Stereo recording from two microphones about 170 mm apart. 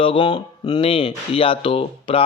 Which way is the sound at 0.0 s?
30° left (ahead or behind).